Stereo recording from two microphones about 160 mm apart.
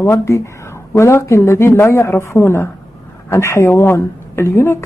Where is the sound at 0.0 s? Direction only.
15° left (ahead or behind).